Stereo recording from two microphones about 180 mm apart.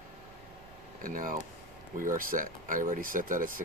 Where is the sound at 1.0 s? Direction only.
50° right (ahead or behind).